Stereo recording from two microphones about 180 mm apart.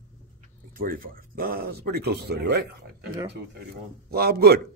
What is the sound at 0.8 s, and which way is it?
Speech, 55° right (ahead or behind).